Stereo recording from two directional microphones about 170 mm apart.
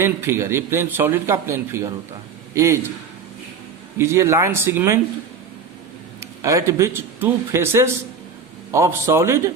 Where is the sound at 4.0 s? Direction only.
15° right (ahead or behind).